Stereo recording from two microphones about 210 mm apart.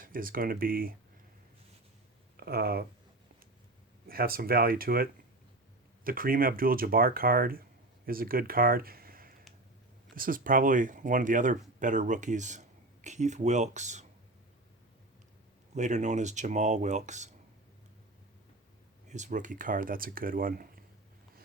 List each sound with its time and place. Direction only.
0.0 s speech: 40° right (ahead or behind)
2.3 s speech: 45° right (ahead or behind)
4.0 s speech: 45° right (ahead or behind)
6.1 s speech: 45° right (ahead or behind)
15.7 s speech: 35° right (ahead or behind)
19.0 s speech: 35° right (ahead or behind)